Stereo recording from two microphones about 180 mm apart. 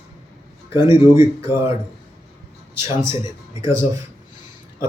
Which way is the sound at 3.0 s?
15° right (ahead or behind).